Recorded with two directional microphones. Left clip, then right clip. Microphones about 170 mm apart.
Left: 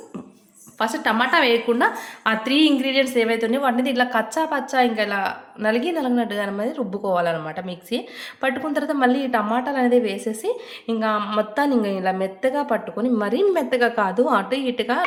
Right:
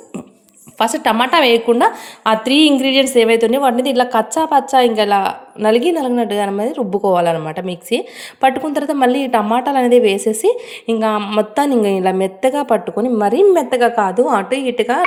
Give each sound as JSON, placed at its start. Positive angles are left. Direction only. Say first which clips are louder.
{"t": 0.8, "sound": "a woman's voice", "louder": "right 6 dB", "side_deg": -35}
{"t": 11.0, "sound": "a woman's voice", "louder": "right 4 dB", "side_deg": -30}
{"t": 13.2, "sound": "a woman's voice", "louder": "right 10 dB", "side_deg": -20}